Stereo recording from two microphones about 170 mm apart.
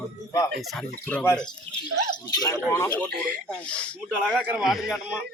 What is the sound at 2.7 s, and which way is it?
Speech, 15° left (ahead or behind).